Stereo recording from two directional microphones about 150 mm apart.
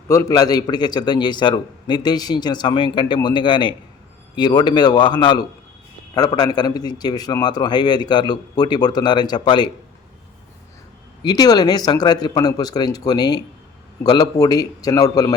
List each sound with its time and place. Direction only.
0.1 s a man's voice: 20° left (ahead or behind)
11.2 s a man's voice: 25° left (ahead or behind)